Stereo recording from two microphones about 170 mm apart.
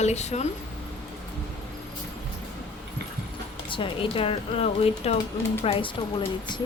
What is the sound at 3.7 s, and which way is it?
Speech, 30° left (ahead or behind).